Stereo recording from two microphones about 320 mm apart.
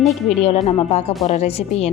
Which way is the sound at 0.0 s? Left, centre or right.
Centre.